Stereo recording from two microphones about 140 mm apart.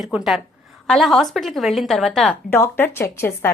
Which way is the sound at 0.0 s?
5° right (ahead or behind).